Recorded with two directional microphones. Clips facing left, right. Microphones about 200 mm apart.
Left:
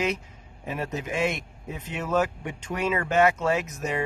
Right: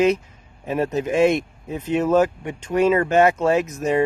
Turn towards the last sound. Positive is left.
turn(degrees=-35)  # may be behind; listen again after turning